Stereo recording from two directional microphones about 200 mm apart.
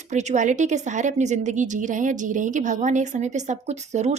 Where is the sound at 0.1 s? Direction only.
35° right (ahead or behind).